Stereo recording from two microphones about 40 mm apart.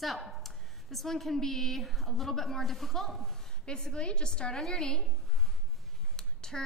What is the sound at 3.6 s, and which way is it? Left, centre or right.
Speech, left.